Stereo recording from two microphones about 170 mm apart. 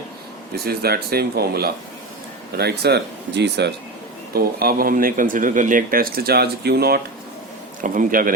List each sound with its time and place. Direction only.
0.5 s speech: 65° right (ahead or behind); by 3.7 s 80° right
4.4 s speech: 60° right (ahead or behind)
7.8 s a man's voice: 50° right (ahead or behind)